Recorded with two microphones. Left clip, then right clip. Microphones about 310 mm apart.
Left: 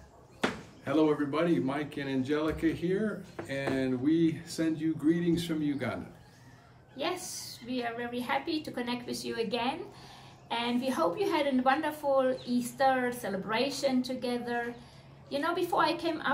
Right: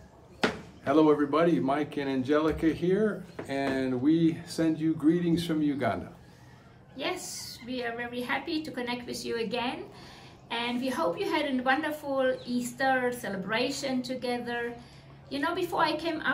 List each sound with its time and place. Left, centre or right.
0.8 s a man's voice: centre
7.0 s a woman's voice: centre